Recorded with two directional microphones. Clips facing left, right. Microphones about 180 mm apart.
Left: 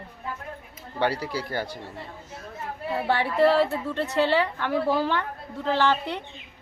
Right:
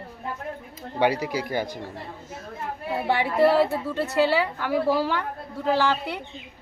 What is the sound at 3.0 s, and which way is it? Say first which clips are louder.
A woman's voice: right 1 dB; 15° right (ahead or behind).